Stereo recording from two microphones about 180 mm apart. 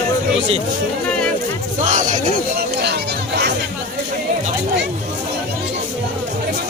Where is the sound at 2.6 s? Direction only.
70° right (ahead or behind).